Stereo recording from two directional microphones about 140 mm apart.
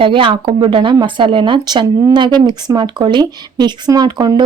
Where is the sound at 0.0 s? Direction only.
35° right (ahead or behind).